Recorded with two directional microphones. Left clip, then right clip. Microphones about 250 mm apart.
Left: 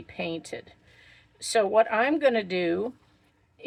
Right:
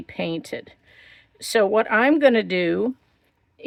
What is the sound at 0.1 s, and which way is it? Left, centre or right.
Speech, right.